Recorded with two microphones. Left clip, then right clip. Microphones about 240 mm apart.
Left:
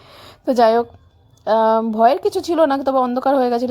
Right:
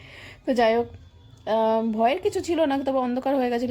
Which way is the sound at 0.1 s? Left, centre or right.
Left.